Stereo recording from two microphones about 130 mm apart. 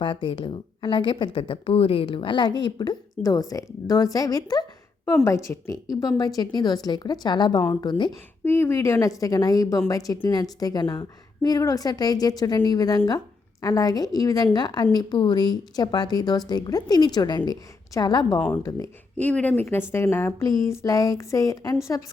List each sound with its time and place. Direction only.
0.0 s a woman's voice: 40° left (ahead or behind)
8.4 s a woman's voice: 20° left (ahead or behind)
19.1 s speech: 10° left (ahead or behind)